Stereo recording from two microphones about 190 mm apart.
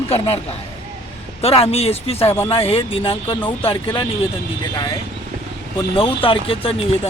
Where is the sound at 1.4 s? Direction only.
30° left (ahead or behind).